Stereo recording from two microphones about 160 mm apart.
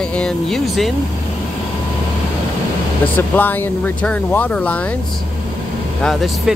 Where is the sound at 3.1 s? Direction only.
10° left (ahead or behind).